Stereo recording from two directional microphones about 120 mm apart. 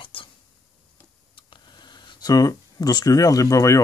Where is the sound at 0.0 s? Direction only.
45° left (ahead or behind).